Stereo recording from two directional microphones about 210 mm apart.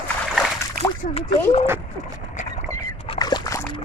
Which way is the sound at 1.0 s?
40° left (ahead or behind).